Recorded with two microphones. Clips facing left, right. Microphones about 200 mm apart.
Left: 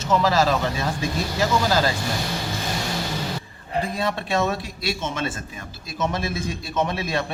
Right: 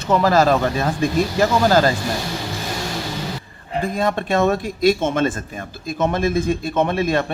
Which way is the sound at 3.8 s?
50° right (ahead or behind).